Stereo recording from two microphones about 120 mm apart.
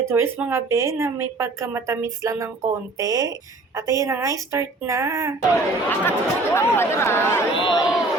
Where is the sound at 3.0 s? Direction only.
30° right (ahead or behind).